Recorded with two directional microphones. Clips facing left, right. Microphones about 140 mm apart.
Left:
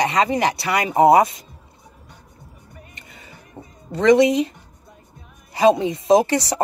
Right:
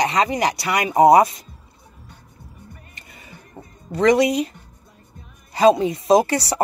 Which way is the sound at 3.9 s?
25° left (ahead or behind).